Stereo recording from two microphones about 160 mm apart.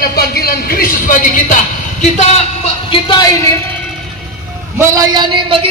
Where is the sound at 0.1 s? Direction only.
75° left (ahead or behind); by 3.3 s 30° left (ahead or behind).